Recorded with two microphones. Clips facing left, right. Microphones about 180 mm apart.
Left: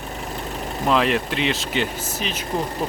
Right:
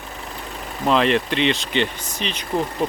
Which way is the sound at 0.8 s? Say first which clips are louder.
Right 2 dB; 5° left (ahead or behind).